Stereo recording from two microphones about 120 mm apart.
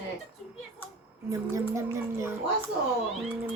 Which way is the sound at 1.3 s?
25° right (ahead or behind).